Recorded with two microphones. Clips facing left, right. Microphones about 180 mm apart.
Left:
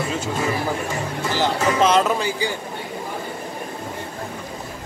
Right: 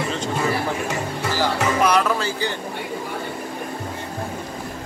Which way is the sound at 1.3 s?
25° left (ahead or behind).